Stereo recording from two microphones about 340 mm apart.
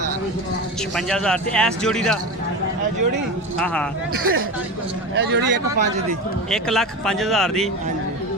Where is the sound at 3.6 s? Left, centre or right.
Centre.